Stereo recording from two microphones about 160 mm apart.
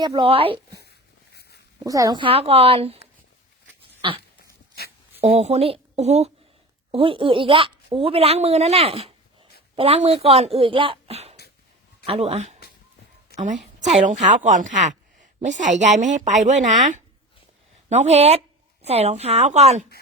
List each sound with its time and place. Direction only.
0.0 s speech: 30° right (ahead or behind)
0.8 s walk: 90° left
1.8 s speech: 20° right (ahead or behind); by 3.0 s 35° right (ahead or behind)
4.0 s speech: 30° right (ahead or behind)
5.2 s a woman's voice: 40° right (ahead or behind)
17.8 s a woman's voice: 45° right (ahead or behind)